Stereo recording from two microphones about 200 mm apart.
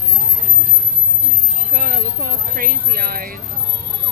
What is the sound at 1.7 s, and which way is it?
Speech, 45° right (ahead or behind).